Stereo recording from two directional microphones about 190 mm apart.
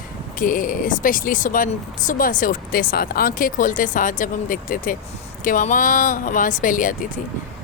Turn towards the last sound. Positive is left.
turn(degrees=45)  # may be behind; listen again after turning